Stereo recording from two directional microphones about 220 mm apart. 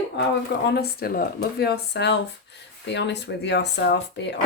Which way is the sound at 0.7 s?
45° left (ahead or behind).